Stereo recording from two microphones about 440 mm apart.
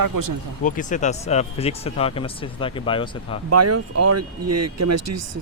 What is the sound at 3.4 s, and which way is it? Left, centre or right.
Speech, right.